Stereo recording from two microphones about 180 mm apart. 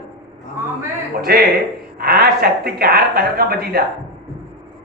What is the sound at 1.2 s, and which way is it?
A man's voice, 60° right (ahead or behind).